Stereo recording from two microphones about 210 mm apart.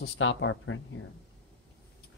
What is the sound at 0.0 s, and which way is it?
Speech, 60° left (ahead or behind).